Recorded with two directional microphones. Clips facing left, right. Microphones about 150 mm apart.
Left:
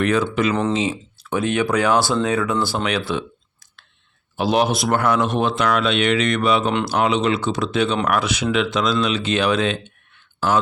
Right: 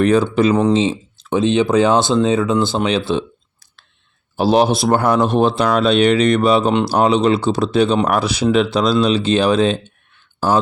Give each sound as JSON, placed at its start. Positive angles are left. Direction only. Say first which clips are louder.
{"t": 0.0, "sound": "speech", "louder": "right 5 dB", "side_deg": -30}